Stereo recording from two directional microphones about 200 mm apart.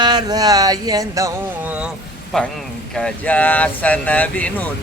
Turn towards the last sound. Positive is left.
turn(degrees=5)  # may be behind; listen again after turning